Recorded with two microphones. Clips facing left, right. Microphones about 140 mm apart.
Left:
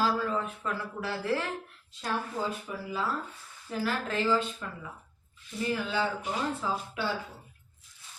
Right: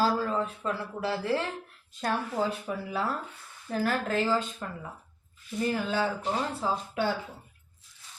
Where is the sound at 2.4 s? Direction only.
70° right (ahead or behind).